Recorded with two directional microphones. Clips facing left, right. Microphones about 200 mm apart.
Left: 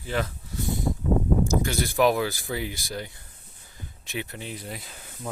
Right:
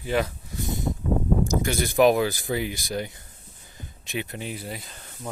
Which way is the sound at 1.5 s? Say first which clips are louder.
Even; 15° right (ahead or behind).